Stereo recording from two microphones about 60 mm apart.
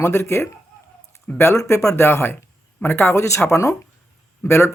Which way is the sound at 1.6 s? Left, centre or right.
Left.